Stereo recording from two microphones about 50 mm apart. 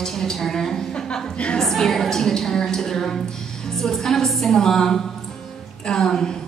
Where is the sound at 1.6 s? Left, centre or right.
Centre.